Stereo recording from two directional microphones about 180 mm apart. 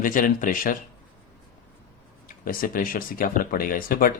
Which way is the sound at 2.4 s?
50° left (ahead or behind).